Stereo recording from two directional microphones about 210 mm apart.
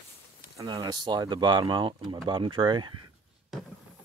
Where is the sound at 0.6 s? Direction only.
20° right (ahead or behind).